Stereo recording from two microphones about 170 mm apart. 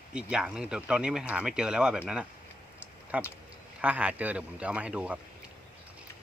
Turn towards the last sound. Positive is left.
turn(degrees=-5)  # may be behind; listen again after turning